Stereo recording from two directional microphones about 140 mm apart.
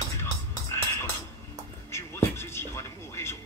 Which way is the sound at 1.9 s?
20° left (ahead or behind).